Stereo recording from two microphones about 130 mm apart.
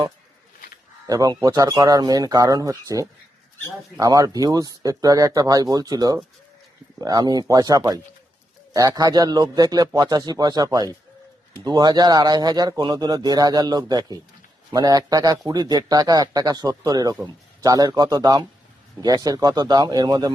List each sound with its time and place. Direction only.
1.0 s speech: 30° right (ahead or behind)
9.0 s speech: 30° right (ahead or behind)